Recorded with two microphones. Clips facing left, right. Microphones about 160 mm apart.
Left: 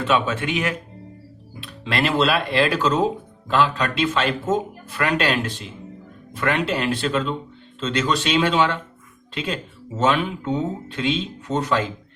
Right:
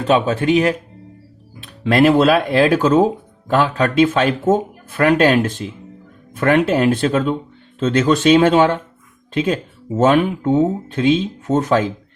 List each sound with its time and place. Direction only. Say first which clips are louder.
0.0 s speech: right 6 dB; 40° right (ahead or behind)
1.6 s speech: right 10 dB; 50° right (ahead or behind)